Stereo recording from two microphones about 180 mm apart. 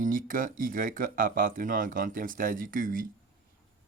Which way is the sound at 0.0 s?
50° right (ahead or behind).